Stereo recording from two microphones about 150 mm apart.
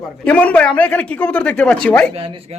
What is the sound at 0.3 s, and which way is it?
Speech, 10° left (ahead or behind).